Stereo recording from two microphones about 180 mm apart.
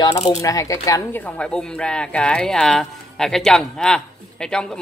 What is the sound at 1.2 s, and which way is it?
Speech, 5° left (ahead or behind).